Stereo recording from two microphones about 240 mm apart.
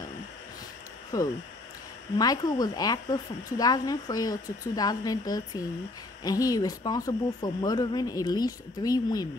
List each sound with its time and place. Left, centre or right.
1.1 s a woman's voice: centre